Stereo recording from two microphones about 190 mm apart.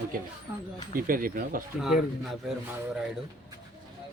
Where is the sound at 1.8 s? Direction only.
Centre (ahead or behind).